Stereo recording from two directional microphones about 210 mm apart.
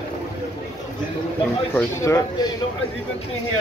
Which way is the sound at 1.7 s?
15° left (ahead or behind).